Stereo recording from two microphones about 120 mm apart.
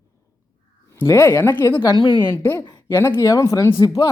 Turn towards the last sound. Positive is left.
turn(degrees=35)  # may be behind; listen again after turning